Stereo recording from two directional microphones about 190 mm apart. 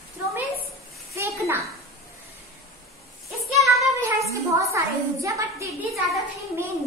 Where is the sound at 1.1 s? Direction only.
15° right (ahead or behind).